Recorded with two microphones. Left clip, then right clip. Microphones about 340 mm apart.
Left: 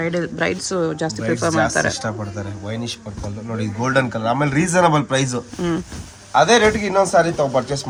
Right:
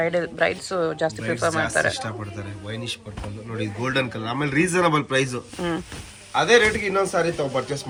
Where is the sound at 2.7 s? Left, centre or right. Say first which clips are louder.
Left 2 dB; left.